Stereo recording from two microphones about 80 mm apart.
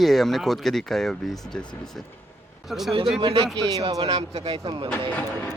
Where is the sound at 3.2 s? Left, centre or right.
Right.